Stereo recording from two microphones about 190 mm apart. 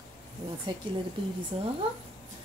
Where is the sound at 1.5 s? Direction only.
30° right (ahead or behind).